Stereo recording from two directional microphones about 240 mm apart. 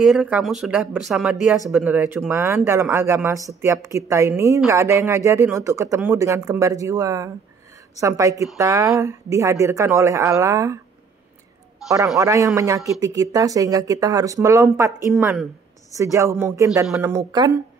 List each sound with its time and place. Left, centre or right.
0.0 s a woman's voice: centre
11.8 s a man's voice: centre
12.2 s a woman's voice: centre